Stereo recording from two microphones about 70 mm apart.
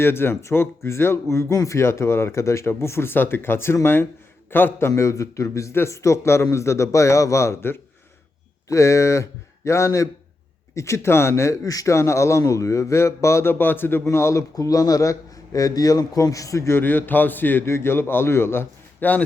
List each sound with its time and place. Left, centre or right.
0.0 s speech: left
4.9 s speech: left
14.5 s a man's voice: left
16.8 s speech: left